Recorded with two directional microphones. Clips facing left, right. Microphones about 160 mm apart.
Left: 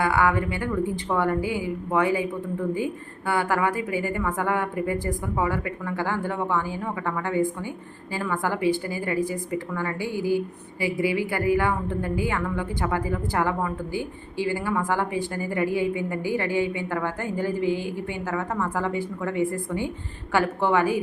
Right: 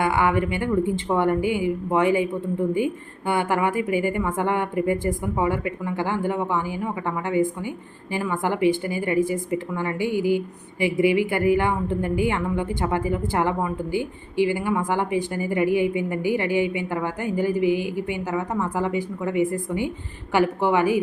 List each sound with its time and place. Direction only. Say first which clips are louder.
0.0 s a woman's voice: right 1 dB; 20° right (ahead or behind)